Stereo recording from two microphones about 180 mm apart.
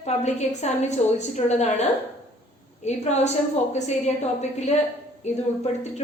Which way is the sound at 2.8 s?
40° left (ahead or behind).